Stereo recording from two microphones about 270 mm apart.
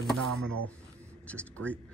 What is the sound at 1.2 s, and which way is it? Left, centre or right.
Speech, centre.